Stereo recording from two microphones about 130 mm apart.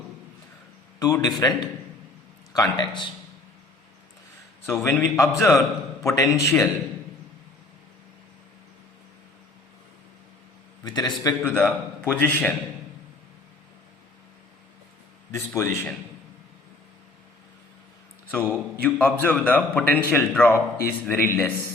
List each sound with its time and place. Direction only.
0.9 s a man's voice: 30° left (ahead or behind)
4.6 s a man's voice: 20° left (ahead or behind)
10.8 s a man's voice: 30° left (ahead or behind)
11.4 s a man's voice: 15° left (ahead or behind)
15.3 s a man's voice: 20° left (ahead or behind)
18.3 s a man's voice: 10° left (ahead or behind)